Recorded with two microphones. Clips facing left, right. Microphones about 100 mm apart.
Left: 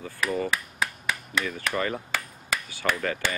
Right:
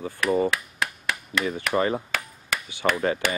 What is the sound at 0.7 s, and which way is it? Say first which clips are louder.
Finger snapping: right 1 dB; centre (ahead or behind).